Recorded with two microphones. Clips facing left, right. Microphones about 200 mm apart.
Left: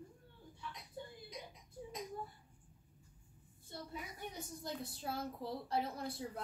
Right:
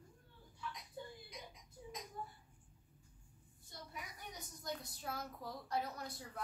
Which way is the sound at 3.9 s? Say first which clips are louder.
Left 3 dB; 30° left (ahead or behind).